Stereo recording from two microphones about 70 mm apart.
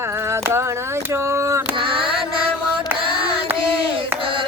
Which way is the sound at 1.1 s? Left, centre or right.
Right.